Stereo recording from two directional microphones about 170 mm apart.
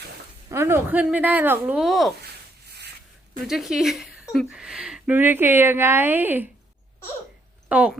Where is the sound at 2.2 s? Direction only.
70° right (ahead or behind).